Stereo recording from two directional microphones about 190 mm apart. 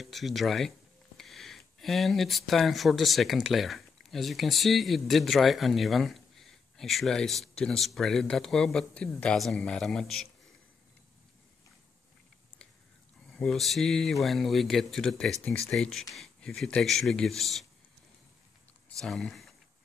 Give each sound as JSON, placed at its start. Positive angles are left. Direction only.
{"t": 0.0, "sound": "speech", "side_deg": 0}
{"t": 13.3, "sound": "speech", "side_deg": 0}
{"t": 18.9, "sound": "speech", "side_deg": 0}